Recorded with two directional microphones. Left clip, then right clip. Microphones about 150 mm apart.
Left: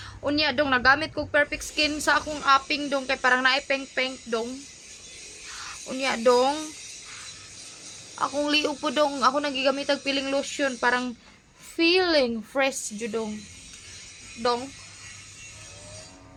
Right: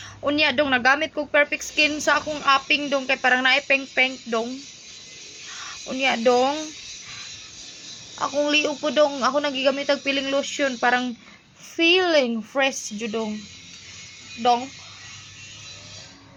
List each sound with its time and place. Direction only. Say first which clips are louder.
0.2 s a woman's voice: right 4 dB; 15° left (ahead or behind)
5.9 s a woman's voice: right 2 dB; 15° left (ahead or behind)
8.1 s a woman's voice: right 3 dB; 25° left (ahead or behind)